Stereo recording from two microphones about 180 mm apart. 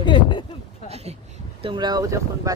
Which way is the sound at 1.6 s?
25° right (ahead or behind).